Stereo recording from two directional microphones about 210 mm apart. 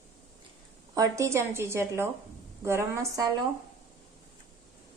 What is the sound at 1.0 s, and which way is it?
A woman's voice, 15° right (ahead or behind).